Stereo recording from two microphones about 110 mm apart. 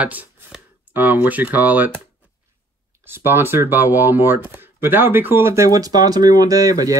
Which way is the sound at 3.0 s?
20° right (ahead or behind).